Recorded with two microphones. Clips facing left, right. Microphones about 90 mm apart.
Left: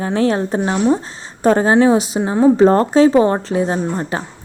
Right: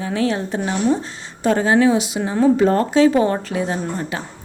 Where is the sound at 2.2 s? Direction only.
25° left (ahead or behind).